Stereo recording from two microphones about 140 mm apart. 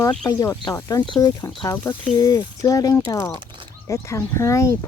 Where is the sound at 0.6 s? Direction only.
25° left (ahead or behind).